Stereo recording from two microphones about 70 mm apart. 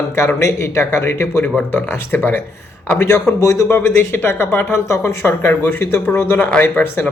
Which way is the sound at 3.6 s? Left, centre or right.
Left.